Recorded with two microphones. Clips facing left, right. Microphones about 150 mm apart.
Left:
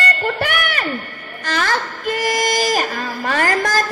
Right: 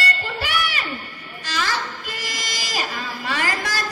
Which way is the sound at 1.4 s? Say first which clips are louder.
Left 5 dB; 55° left (ahead or behind).